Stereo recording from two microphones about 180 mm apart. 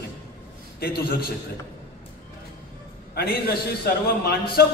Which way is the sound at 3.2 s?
60° left (ahead or behind).